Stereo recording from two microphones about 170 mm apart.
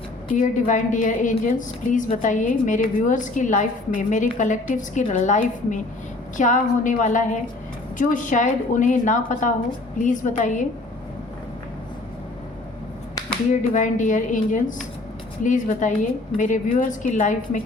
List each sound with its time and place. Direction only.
0.3 s a woman's voice: 50° left (ahead or behind)
13.5 s a woman's voice: 45° left (ahead or behind)